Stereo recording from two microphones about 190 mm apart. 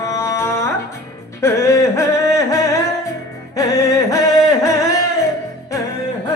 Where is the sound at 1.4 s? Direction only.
15° left (ahead or behind).